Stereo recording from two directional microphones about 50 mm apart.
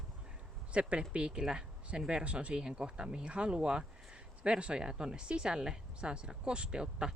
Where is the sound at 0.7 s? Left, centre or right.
Right.